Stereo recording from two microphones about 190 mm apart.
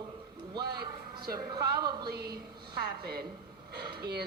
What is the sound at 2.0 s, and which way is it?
A woman's voice, 55° right (ahead or behind).